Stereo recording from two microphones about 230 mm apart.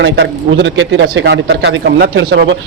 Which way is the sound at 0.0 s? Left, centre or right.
Right.